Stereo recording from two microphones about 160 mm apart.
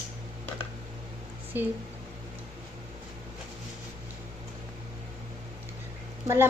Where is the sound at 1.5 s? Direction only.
10° right (ahead or behind).